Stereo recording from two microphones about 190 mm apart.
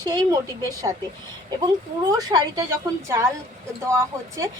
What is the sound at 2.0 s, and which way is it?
A woman's voice, 20° right (ahead or behind).